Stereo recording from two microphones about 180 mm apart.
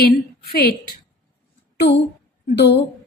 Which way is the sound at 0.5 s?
60° left (ahead or behind).